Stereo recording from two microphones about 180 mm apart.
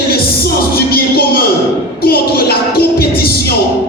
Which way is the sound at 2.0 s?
60° left (ahead or behind).